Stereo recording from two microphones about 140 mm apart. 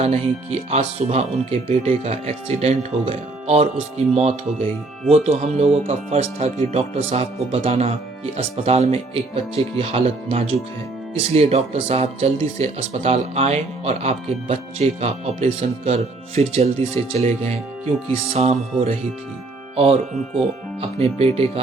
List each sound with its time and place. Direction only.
0.0 s speech: 50° right (ahead or behind)
21.0 s speech: 45° right (ahead or behind)